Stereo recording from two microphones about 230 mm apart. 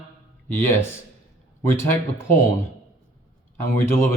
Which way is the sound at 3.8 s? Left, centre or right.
Centre.